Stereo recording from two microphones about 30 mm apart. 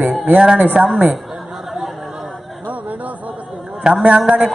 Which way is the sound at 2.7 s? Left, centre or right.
Right.